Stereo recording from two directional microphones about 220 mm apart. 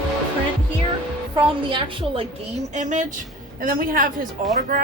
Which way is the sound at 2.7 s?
35° right (ahead or behind).